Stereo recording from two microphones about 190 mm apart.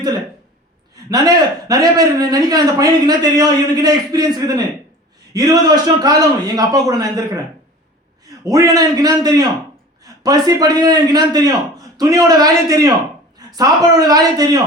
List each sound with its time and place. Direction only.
0.9 s a man's voice: 20° right (ahead or behind)
8.4 s a man's voice: 20° right (ahead or behind)